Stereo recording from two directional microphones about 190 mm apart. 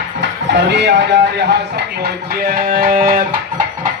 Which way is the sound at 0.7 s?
65° right (ahead or behind).